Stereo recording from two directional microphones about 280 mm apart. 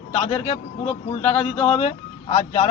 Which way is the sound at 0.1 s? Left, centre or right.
Centre.